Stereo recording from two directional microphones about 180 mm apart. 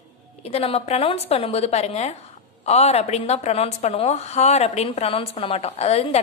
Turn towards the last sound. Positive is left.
turn(degrees=35)  # may be behind; listen again after turning